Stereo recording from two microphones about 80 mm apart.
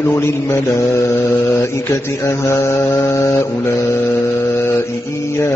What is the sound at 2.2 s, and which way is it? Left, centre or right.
Mantra, left.